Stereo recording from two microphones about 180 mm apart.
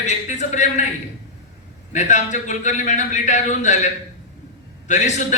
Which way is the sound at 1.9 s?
40° left (ahead or behind).